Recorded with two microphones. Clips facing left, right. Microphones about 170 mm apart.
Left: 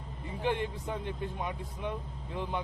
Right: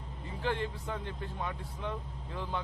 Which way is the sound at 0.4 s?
15° left (ahead or behind).